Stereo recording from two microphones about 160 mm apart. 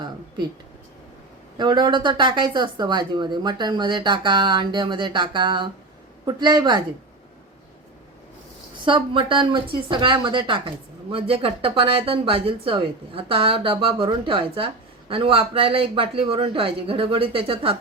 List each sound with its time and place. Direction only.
1.5 s speech: 30° right (ahead or behind)
8.8 s speech: 30° right (ahead or behind)